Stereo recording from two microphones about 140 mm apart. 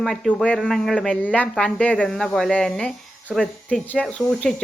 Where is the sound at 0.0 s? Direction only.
5° left (ahead or behind).